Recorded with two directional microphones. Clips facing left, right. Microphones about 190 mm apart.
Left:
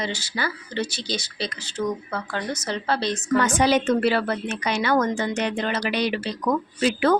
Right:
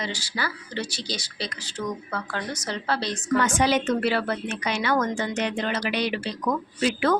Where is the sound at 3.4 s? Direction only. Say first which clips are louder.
Left 3 dB; 35° left (ahead or behind).